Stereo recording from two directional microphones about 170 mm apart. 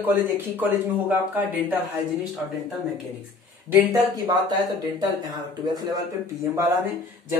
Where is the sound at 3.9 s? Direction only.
25° right (ahead or behind).